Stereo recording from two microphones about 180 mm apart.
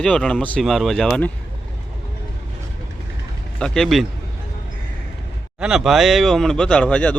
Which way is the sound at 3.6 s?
Centre (ahead or behind).